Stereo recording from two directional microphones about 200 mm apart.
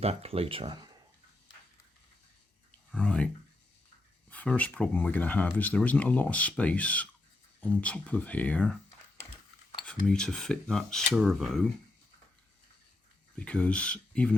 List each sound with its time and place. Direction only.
0.0 s speech: 30° right (ahead or behind)
3.0 s speech: 5° left (ahead or behind)
4.3 s speech: 5° left (ahead or behind)
9.8 s speech: 5° left (ahead or behind)
13.4 s speech: 5° left (ahead or behind)